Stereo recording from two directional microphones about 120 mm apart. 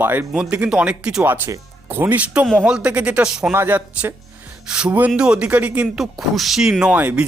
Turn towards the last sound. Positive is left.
turn(degrees=-10)  # may be behind; listen again after turning